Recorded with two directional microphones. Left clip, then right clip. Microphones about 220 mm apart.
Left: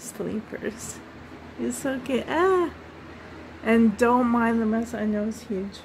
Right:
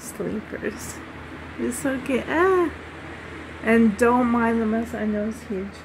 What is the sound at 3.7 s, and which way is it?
A woman's voice, 10° left (ahead or behind).